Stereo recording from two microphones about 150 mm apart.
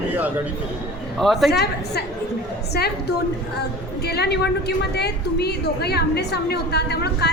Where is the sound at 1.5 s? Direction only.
90° left.